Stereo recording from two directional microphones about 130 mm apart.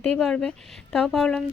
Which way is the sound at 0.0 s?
5° left (ahead or behind).